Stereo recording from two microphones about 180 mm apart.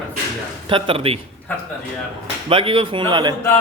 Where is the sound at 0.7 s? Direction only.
30° right (ahead or behind).